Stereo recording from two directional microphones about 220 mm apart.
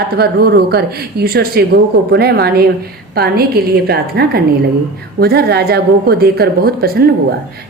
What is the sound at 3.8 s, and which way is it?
Speech, 45° right (ahead or behind).